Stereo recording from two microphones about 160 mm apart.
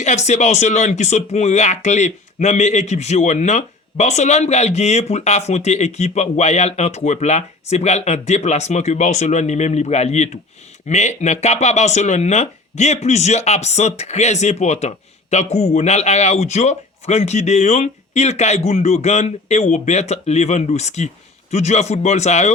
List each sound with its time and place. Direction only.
0.0 s speech: 45° left (ahead or behind)